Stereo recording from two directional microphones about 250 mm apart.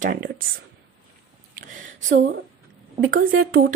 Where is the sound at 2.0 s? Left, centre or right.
Right.